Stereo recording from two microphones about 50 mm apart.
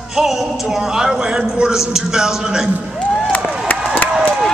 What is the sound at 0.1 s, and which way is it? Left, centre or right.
A man's voice, centre.